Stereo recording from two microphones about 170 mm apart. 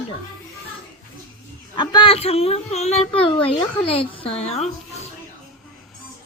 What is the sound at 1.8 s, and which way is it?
A child's voice, 30° left (ahead or behind).